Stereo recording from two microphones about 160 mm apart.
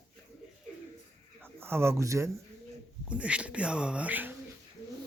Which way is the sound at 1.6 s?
15° right (ahead or behind).